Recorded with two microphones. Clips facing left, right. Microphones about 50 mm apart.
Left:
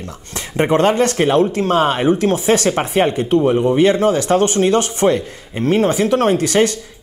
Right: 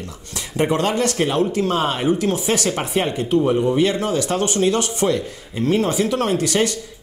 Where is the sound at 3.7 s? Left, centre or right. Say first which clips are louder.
Left 5 dB; left.